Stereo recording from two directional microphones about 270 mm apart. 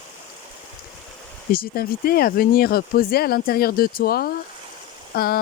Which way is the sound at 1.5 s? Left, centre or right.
Left.